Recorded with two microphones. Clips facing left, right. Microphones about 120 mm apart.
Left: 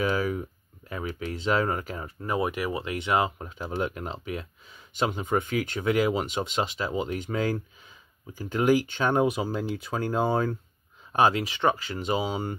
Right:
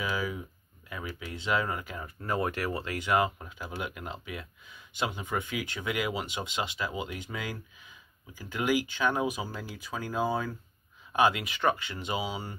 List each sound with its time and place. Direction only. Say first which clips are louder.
0.1 s speech: left 6 dB; 50° left (ahead or behind)
0.9 s speech: left 6 dB; 25° left (ahead or behind)
1.3 s speech: left 4 dB; 40° left (ahead or behind)
2.2 s speech: left 3 dB; 15° left (ahead or behind)
3.3 s speech: left 7 dB; 40° left (ahead or behind)
9.1 s speech: left 7 dB; 65° left (ahead or behind)
11.1 s speech: left 3 dB; 35° left (ahead or behind)